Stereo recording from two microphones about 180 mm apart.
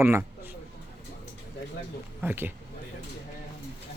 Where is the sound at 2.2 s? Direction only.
10° right (ahead or behind).